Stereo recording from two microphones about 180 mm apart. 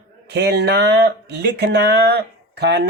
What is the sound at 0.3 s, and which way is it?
Speech, 70° right (ahead or behind).